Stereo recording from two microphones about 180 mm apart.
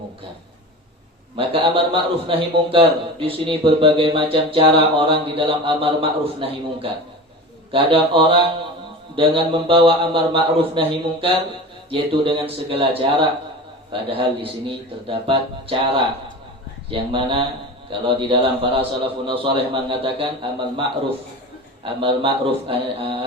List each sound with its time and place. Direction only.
1.4 s a man's voice: 30° right (ahead or behind)
16.9 s a man's voice: 30° right (ahead or behind)
21.8 s a man's voice: 30° right (ahead or behind)